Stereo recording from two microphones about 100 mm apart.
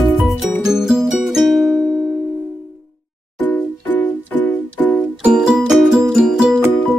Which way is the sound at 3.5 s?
20° left (ahead or behind).